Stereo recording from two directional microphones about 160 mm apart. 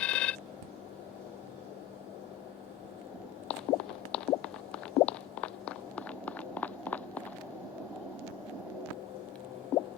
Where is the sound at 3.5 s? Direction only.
5° left (ahead or behind).